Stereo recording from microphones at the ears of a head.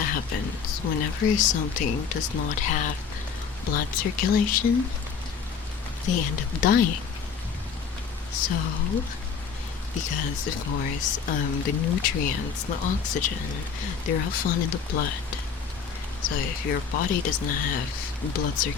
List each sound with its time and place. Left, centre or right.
0.0 s speech: left
6.1 s speech: left
8.3 s speech: left